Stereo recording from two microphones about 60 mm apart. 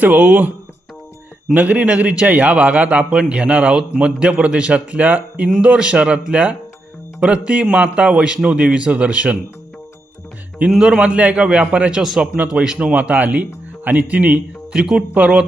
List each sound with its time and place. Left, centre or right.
0.0 s a man's voice: right
1.5 s a man's voice: right
10.7 s a man's voice: centre
12.0 s a man's voice: centre; by 14.4 s right
14.7 s a man's voice: centre